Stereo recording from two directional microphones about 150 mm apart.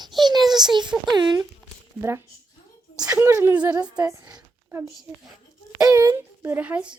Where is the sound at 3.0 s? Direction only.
20° right (ahead or behind).